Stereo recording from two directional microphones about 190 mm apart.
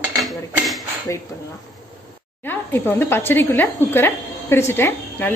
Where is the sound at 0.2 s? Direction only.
Centre (ahead or behind).